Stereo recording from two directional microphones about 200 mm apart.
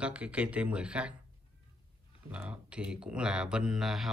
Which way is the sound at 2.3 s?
5° right (ahead or behind).